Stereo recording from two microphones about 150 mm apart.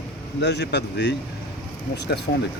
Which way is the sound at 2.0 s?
90° left.